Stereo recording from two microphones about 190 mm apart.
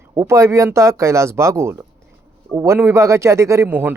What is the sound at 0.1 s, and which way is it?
Speech, 15° right (ahead or behind).